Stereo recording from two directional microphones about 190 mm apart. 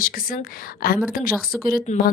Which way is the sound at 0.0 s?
50° left (ahead or behind).